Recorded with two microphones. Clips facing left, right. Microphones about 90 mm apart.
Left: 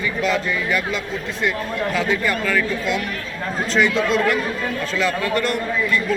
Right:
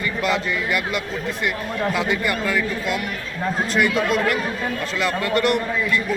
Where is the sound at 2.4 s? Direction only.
10° right (ahead or behind).